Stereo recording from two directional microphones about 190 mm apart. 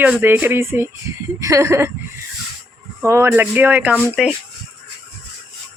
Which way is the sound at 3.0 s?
15° right (ahead or behind).